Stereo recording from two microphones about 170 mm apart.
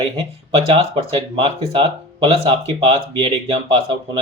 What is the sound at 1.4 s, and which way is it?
Speech, 30° right (ahead or behind).